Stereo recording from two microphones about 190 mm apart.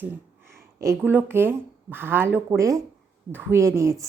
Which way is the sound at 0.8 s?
15° right (ahead or behind).